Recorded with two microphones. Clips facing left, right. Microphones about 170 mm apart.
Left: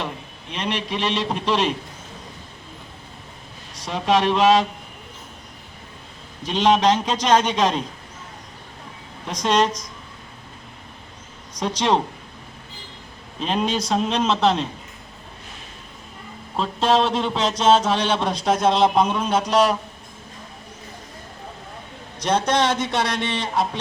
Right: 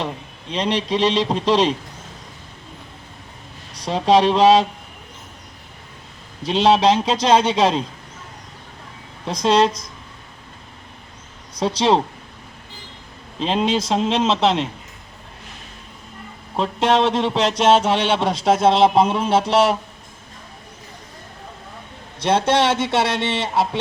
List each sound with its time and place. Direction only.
0.5 s a man's voice: 35° right (ahead or behind)
3.8 s a man's voice: 35° right (ahead or behind)
6.4 s a man's voice: 30° right (ahead or behind)
9.2 s a man's voice: 30° right (ahead or behind)
11.6 s a man's voice: 30° right (ahead or behind)
13.4 s a man's voice: 25° right (ahead or behind)
16.6 s a man's voice: 20° right (ahead or behind)
22.2 s a man's voice: 25° right (ahead or behind)